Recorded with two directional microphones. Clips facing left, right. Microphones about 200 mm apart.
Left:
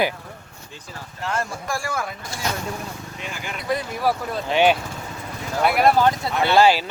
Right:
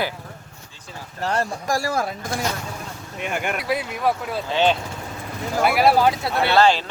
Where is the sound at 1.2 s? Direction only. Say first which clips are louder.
Right 3 dB; 35° right (ahead or behind).